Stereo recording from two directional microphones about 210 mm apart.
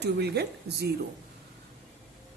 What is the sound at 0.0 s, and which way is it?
Speech, 50° right (ahead or behind).